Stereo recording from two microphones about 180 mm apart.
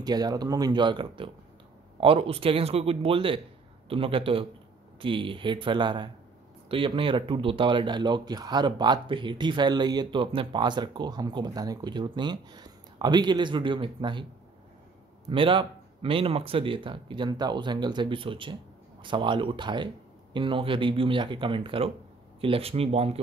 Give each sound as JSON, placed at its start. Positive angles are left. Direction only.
{"t": 0.0, "sound": "speech", "side_deg": -20}
{"t": 15.2, "sound": "speech", "side_deg": -30}